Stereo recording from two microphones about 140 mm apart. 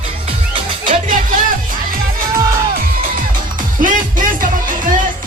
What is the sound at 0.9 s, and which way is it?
Music, 70° right (ahead or behind).